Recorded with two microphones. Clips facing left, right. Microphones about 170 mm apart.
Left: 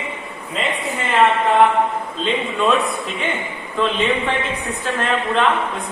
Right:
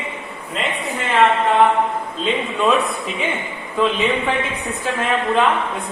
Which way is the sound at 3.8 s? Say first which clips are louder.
Right 2 dB; 5° right (ahead or behind).